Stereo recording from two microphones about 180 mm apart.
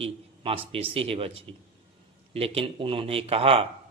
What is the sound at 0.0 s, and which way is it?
Speech, 30° right (ahead or behind).